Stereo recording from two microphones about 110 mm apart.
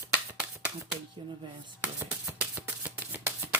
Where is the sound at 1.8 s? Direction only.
15° right (ahead or behind).